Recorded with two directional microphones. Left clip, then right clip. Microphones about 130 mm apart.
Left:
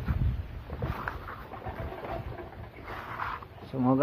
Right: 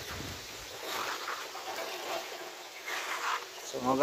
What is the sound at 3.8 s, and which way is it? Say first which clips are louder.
Bee: left 3 dB; 30° right (ahead or behind).